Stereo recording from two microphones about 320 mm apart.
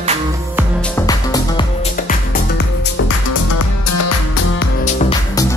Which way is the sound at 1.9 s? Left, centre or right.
Left.